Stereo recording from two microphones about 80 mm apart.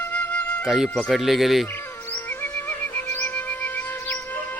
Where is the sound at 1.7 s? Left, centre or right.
Left.